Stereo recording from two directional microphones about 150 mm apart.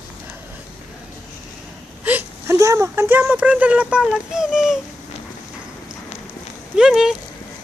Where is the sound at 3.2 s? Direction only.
5° right (ahead or behind).